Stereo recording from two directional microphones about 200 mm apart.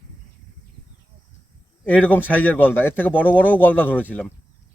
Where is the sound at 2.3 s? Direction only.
10° left (ahead or behind).